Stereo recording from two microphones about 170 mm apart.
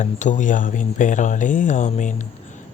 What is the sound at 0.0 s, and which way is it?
Speech, 45° left (ahead or behind).